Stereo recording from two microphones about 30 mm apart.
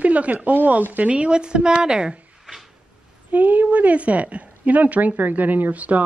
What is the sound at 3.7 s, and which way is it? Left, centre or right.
A woman's voice, right.